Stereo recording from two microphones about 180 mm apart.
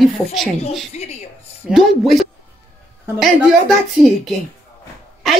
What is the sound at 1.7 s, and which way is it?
Speech, centre (ahead or behind).